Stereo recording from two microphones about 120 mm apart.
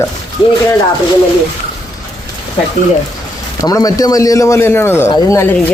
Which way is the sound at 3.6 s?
30° left (ahead or behind).